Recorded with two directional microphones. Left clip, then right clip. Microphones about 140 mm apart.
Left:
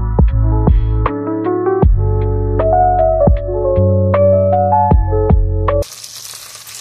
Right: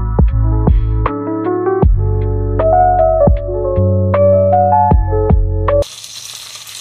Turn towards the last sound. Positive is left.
turn(degrees=0)  # may be behind; listen again after turning